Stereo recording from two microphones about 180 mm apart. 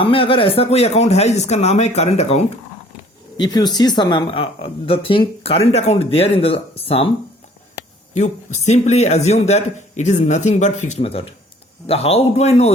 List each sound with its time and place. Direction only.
0.0 s speech: 30° left (ahead or behind)
3.3 s speech: 25° left (ahead or behind)
8.1 s speech: 40° left (ahead or behind)